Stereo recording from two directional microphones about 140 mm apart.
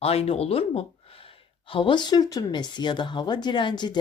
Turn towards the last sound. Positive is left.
turn(degrees=30)  # may be behind; listen again after turning